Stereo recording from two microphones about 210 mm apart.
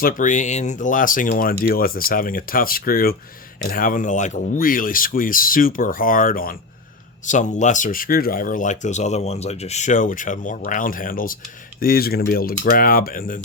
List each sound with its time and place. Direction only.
0.0 s speech: 40° left (ahead or behind)